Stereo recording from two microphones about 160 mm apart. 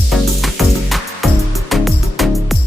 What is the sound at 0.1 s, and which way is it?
Music, centre (ahead or behind).